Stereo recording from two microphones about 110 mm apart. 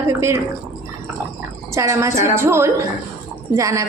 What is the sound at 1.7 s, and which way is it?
A woman's voice, 30° right (ahead or behind).